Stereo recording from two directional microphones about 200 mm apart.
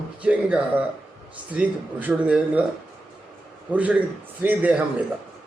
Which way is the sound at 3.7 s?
5° right (ahead or behind).